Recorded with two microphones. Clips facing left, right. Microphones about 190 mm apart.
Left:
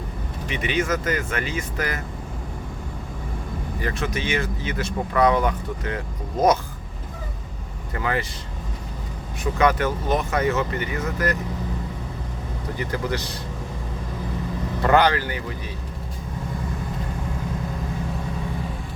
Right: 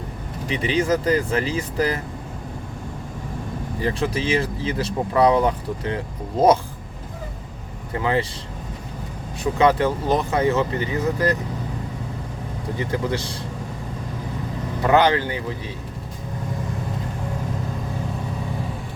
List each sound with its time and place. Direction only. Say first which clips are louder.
0.4 s speech: right 3 dB; 30° right (ahead or behind)
3.8 s speech: right 4 dB; 30° right (ahead or behind)
7.9 s speech: right 4 dB; 25° right (ahead or behind)
9.4 s speech: right 3 dB; 30° right (ahead or behind)
12.7 s speech: right 2 dB; 25° right (ahead or behind)
14.8 s speech: right 1 dB; 15° right (ahead or behind)